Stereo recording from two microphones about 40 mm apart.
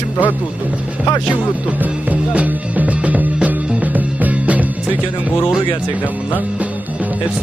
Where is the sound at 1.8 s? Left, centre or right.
Right.